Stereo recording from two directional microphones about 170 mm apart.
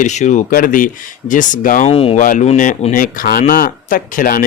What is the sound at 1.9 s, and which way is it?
Speech, 35° left (ahead or behind).